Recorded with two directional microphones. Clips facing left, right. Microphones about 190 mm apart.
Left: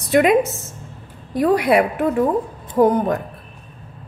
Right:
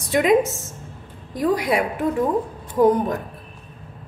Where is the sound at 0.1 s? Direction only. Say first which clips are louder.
Left 2 dB; 65° left (ahead or behind).